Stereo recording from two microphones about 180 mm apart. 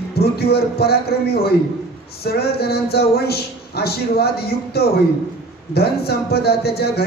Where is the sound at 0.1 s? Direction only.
60° left (ahead or behind).